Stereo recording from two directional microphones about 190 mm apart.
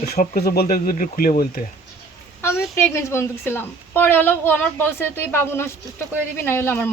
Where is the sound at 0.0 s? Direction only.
55° left (ahead or behind).